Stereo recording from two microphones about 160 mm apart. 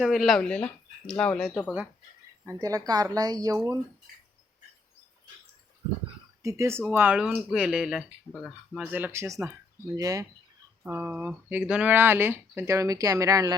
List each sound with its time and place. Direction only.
0.0 s speech: centre (ahead or behind)
2.5 s speech: 20° right (ahead or behind)
6.4 s speech: 20° right (ahead or behind)